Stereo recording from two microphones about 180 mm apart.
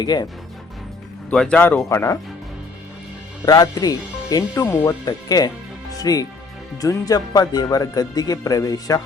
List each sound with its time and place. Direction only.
0.0 s speech: 25° left (ahead or behind)
1.3 s speech: 5° left (ahead or behind)
3.4 s speech: 20° left (ahead or behind)